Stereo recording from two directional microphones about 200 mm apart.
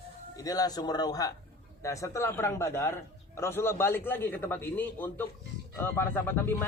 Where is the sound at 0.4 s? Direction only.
20° left (ahead or behind).